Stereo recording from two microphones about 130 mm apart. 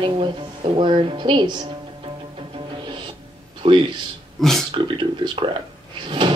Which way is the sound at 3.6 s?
45° right (ahead or behind).